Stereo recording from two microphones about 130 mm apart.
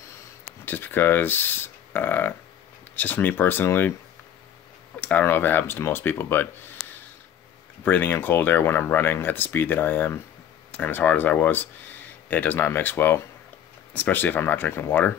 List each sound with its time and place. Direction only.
0.7 s speech: 15° left (ahead or behind)
5.0 s speech: 15° left (ahead or behind)
6.8 s a sound: 5° left (ahead or behind)
7.8 s speech: 15° left (ahead or behind)